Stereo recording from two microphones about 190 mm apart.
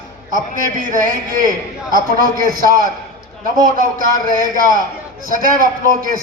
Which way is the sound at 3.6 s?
50° right (ahead or behind).